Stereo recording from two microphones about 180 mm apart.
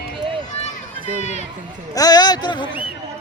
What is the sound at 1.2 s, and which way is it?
Run, 40° left (ahead or behind).